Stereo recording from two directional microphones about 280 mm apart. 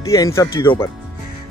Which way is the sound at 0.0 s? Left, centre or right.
Centre.